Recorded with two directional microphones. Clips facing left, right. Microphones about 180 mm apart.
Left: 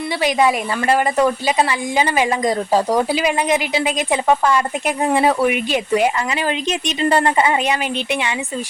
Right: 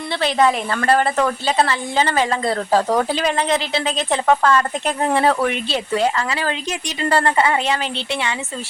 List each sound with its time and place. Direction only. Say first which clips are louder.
0.2 s a woman's voice: even; 10° left (ahead or behind)